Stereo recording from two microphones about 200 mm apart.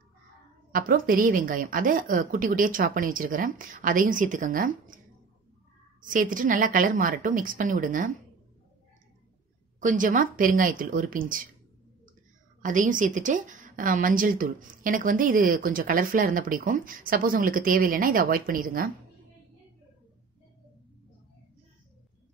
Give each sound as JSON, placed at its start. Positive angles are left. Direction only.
{"t": 0.7, "sound": "a woman's voice", "side_deg": -45}
{"t": 6.0, "sound": "a woman's voice", "side_deg": -40}
{"t": 9.8, "sound": "a woman's voice", "side_deg": -40}
{"t": 12.6, "sound": "a woman's voice", "side_deg": -40}